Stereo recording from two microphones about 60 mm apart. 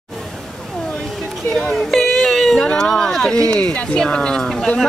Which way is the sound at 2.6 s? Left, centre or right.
Centre.